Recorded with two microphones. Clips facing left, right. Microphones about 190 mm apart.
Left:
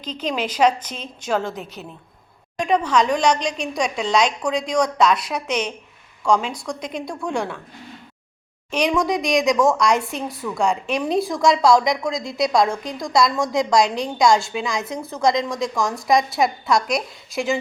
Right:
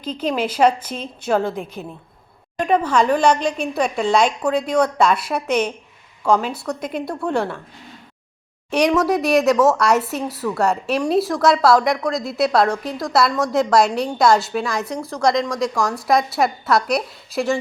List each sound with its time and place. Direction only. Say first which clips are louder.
0.0 s a woman's voice: right 3 dB; 5° right (ahead or behind)
1.8 s a woman's voice: right 4 dB; 5° left (ahead or behind)
8.9 s a woman's voice: right 2 dB; 5° right (ahead or behind)